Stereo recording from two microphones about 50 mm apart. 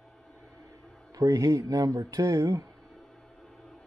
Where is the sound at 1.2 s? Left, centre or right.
Right.